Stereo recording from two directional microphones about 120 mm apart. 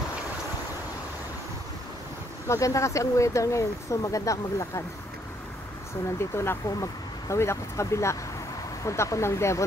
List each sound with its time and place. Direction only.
2.4 s speech: 25° left (ahead or behind)
6.1 s speech: 20° left (ahead or behind)